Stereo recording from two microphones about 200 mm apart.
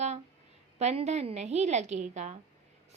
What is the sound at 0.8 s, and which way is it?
A woman's voice, 35° right (ahead or behind).